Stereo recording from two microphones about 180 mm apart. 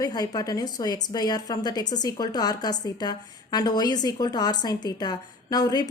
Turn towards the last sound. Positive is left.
turn(degrees=20)  # may be behind; listen again after turning